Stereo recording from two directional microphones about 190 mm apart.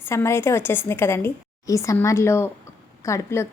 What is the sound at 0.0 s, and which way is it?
A woman's voice, 15° left (ahead or behind).